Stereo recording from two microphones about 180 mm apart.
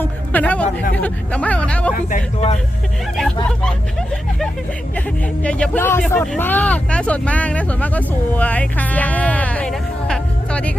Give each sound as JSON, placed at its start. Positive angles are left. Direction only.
{"t": 0.0, "sound": "speech", "side_deg": 10}
{"t": 2.0, "sound": "speech", "side_deg": 45}
{"t": 4.9, "sound": "speech", "side_deg": 5}